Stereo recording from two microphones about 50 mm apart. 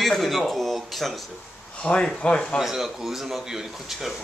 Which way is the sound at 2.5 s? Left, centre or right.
Centre.